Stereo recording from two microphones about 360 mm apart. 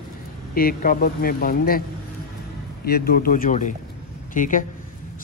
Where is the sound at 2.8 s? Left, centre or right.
Left.